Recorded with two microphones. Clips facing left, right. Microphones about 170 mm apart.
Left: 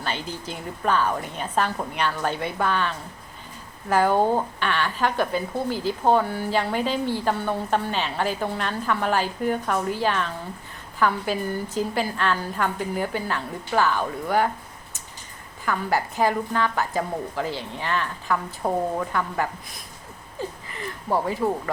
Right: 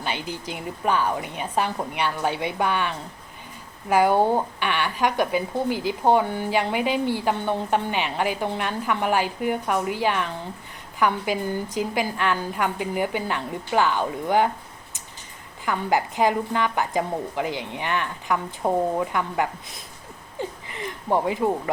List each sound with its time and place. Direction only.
0.0 s speech: 15° right (ahead or behind)
15.6 s speech: 15° right (ahead or behind)
20.4 s a sound: 20° right (ahead or behind)